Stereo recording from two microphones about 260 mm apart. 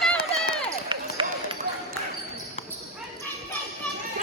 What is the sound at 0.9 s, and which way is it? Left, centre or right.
Basketball bounce, centre.